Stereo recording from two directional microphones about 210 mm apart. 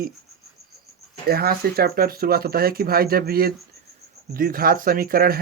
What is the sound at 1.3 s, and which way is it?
Speech, 45° right (ahead or behind).